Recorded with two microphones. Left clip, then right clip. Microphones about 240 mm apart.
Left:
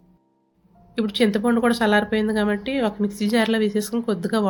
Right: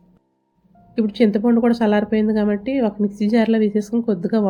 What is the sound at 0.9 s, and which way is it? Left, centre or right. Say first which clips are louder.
Speech: right 3 dB; centre.